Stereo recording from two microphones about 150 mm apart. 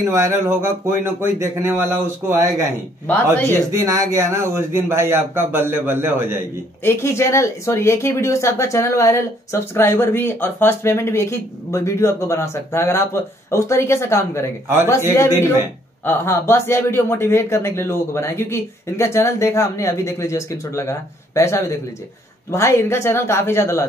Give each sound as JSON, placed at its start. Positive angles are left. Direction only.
{"t": 0.0, "sound": "a man's voice", "side_deg": -20}
{"t": 3.7, "sound": "a man's voice", "side_deg": -20}
{"t": 6.8, "sound": "speech", "side_deg": 15}